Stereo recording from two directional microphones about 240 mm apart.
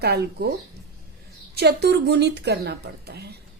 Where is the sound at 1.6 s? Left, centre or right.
Right.